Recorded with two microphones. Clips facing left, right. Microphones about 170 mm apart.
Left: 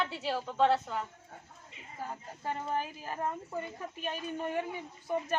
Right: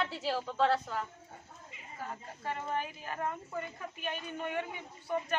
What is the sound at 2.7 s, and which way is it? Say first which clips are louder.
A man's voice: left 1 dB; 35° left (ahead or behind).